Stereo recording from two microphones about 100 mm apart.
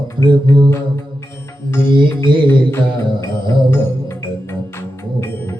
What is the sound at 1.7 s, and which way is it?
Music, 25° left (ahead or behind).